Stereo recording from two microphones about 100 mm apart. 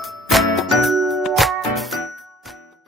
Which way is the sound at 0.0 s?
Centre (ahead or behind).